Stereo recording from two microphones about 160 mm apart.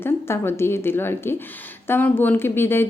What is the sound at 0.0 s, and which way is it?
A woman's voice, 15° left (ahead or behind).